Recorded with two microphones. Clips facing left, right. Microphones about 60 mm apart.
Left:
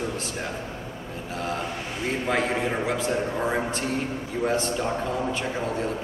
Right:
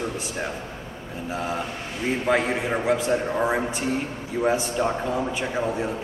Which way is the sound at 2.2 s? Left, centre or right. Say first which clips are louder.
Right 2 dB; centre.